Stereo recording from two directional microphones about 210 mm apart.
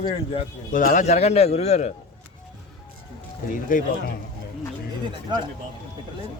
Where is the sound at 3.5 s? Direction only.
40° left (ahead or behind).